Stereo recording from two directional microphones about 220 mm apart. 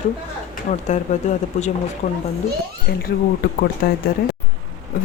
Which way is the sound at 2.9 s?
45° left (ahead or behind).